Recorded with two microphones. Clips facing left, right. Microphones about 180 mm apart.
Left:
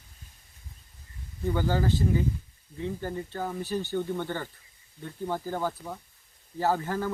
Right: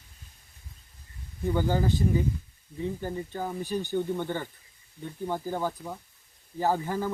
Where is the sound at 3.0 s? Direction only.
15° right (ahead or behind).